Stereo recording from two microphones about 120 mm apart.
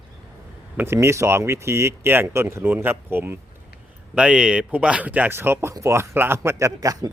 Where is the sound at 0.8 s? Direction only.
20° right (ahead or behind).